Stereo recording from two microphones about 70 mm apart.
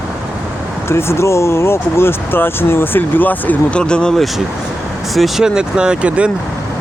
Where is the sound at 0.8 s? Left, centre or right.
Left.